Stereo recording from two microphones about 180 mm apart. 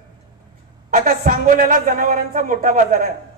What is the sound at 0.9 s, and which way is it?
Speech, 45° right (ahead or behind).